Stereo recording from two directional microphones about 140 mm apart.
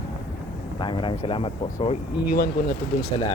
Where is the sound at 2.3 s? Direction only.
90° left.